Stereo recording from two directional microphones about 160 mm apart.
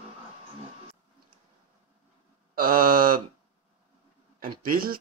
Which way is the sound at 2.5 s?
60° right (ahead or behind).